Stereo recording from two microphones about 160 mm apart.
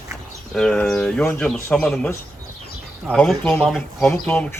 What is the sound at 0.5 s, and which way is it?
Speech, 5° left (ahead or behind).